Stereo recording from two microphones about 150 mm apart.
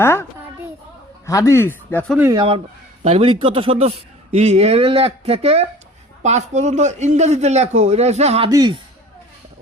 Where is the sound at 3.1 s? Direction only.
40° right (ahead or behind).